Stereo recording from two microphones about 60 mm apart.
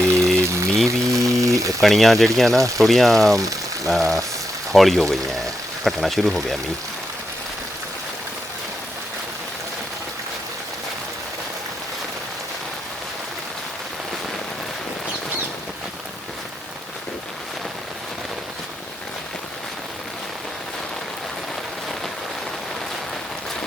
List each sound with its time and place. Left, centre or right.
0.3 s a sound: right
0.9 s a sound: right
1.8 s speech: centre
2.6 s speech: right
2.8 s speech: centre
3.3 s speech: right
3.8 s speech: centre